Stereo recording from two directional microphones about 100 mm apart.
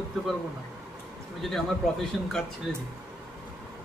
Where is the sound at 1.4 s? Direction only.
Centre (ahead or behind).